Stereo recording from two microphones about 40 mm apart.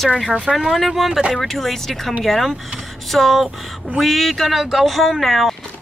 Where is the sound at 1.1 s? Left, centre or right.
Centre.